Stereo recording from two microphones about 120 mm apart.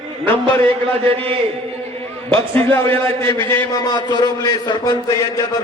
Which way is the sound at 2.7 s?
20° left (ahead or behind).